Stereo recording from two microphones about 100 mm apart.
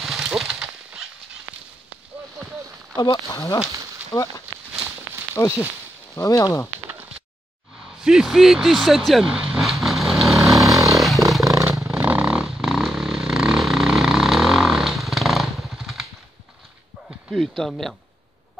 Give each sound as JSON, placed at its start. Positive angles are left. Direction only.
{"t": 0.0, "sound": "horse", "side_deg": -5}
{"t": 3.0, "sound": "speech", "side_deg": 40}
{"t": 4.1, "sound": "speech", "side_deg": 15}
{"t": 5.3, "sound": "speech", "side_deg": 25}
{"t": 8.0, "sound": "speech", "side_deg": -5}
{"t": 9.5, "sound": "vehicle", "side_deg": 0}
{"t": 11.4, "sound": "vehicle", "side_deg": -35}
{"t": 11.9, "sound": "vehicle", "side_deg": -15}
{"t": 17.3, "sound": "speech", "side_deg": 0}